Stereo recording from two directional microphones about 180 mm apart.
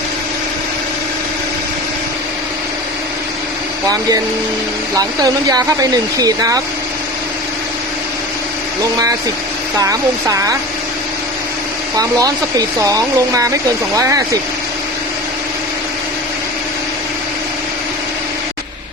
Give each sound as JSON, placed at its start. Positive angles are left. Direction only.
{"t": 4.9, "sound": "speech", "side_deg": -20}
{"t": 9.8, "sound": "speech", "side_deg": -20}
{"t": 11.9, "sound": "speech", "side_deg": -20}